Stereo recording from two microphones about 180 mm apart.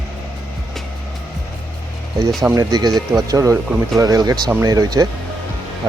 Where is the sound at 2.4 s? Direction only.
20° right (ahead or behind).